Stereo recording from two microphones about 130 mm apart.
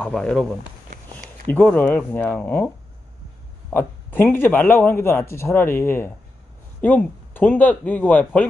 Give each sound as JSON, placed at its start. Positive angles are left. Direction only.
{"t": 0.0, "sound": "speech", "side_deg": 5}
{"t": 1.5, "sound": "speech", "side_deg": 15}
{"t": 3.7, "sound": "speech", "side_deg": 15}